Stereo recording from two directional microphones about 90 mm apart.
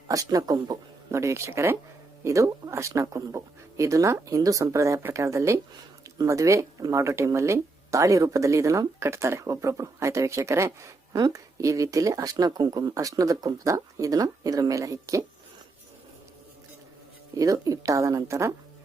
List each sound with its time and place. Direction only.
0.1 s speech: 40° right (ahead or behind)
1.1 s speech: 30° right (ahead or behind)
17.3 s speech: 40° right (ahead or behind)